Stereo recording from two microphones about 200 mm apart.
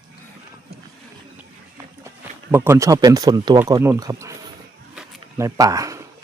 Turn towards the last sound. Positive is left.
turn(degrees=-15)  # may be behind; listen again after turning